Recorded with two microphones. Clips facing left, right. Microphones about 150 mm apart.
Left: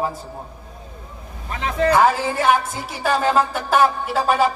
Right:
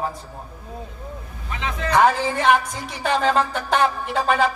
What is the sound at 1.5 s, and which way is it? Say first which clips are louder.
Vehicle: left 7 dB; 45° left (ahead or behind).